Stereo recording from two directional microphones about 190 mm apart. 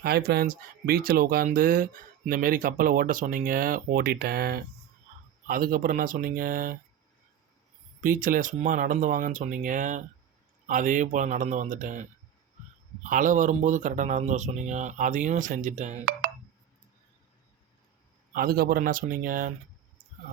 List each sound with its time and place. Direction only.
0.0 s speech: 55° right (ahead or behind)
8.0 s speech: 45° right (ahead or behind)
18.3 s speech: 55° right (ahead or behind)